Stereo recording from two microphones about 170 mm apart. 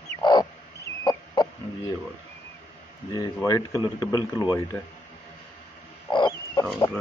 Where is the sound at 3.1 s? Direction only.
20° left (ahead or behind).